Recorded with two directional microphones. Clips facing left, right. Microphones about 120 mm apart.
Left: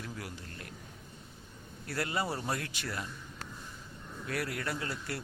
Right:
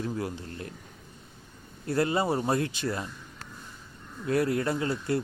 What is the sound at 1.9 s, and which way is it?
Speech, 25° right (ahead or behind).